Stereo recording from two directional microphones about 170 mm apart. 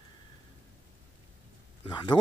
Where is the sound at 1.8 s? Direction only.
25° left (ahead or behind).